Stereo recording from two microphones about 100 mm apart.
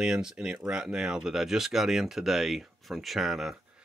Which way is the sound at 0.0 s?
5° right (ahead or behind).